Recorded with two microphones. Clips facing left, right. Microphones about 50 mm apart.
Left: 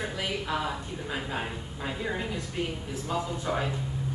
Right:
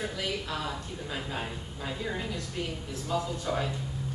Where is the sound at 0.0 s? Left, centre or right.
Centre.